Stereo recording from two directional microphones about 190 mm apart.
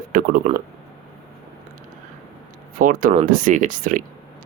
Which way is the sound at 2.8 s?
45° right (ahead or behind).